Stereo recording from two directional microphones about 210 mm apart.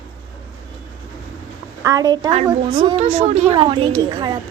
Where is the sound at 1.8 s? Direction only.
15° right (ahead or behind).